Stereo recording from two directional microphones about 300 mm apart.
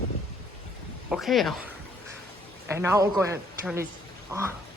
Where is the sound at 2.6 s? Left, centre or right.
Centre.